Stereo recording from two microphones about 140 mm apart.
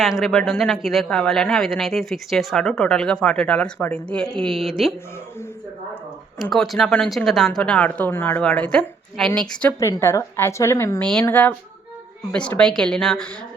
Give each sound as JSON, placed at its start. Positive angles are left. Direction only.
{"t": 0.0, "sound": "speech", "side_deg": 0}
{"t": 6.4, "sound": "speech", "side_deg": 0}
{"t": 9.8, "sound": "a woman's voice", "side_deg": 20}
{"t": 11.0, "sound": "speech", "side_deg": 5}